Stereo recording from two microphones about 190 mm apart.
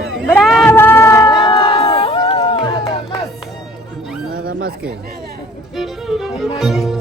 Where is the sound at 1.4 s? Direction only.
25° left (ahead or behind).